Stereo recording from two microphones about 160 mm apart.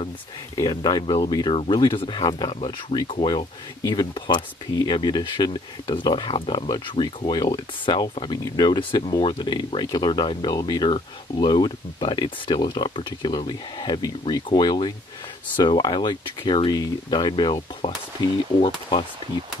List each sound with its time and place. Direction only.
0.6 s speech: 25° left (ahead or behind)